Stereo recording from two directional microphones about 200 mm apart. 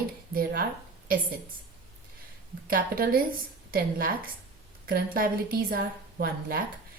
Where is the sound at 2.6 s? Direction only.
45° right (ahead or behind).